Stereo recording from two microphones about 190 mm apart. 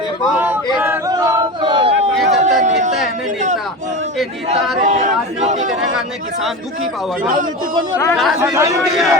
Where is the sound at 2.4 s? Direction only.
40° right (ahead or behind).